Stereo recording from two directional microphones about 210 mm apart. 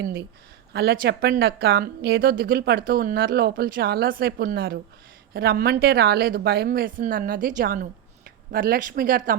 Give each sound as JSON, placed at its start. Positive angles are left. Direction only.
{"t": 0.7, "sound": "a woman's voice", "side_deg": -50}